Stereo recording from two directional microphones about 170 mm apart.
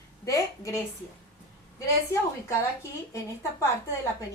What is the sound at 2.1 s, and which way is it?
A woman's voice, 15° left (ahead or behind).